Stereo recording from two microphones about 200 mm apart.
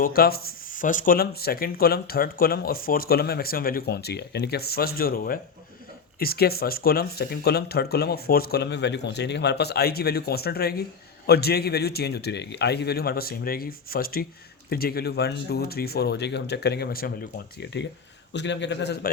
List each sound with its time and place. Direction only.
0.0 s a man's voice: 50° left (ahead or behind)